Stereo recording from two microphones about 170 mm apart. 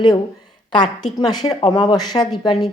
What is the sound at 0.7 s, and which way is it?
A woman's voice, 25° left (ahead or behind).